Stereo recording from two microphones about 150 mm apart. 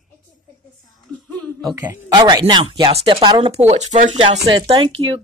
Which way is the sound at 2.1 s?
30° right (ahead or behind).